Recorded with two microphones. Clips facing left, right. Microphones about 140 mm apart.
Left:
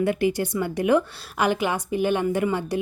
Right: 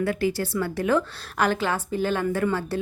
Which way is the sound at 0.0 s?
20° left (ahead or behind).